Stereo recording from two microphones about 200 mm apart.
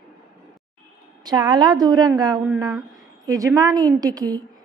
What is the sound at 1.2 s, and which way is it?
A woman's voice, 20° right (ahead or behind).